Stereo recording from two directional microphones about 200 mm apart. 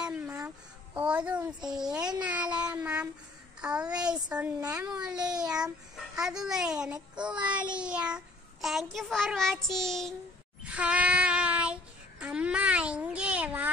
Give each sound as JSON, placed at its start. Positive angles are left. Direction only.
{"t": 0.0, "sound": "a sound", "side_deg": -5}
{"t": 0.9, "sound": "a child's voice", "side_deg": -5}
{"t": 4.6, "sound": "a child's voice", "side_deg": -15}
{"t": 4.8, "sound": "a child's voice", "side_deg": -5}
{"t": 10.6, "sound": "child singing", "side_deg": -5}